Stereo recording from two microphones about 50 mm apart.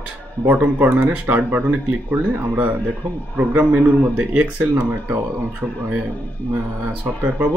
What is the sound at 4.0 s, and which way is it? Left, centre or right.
Speech, right.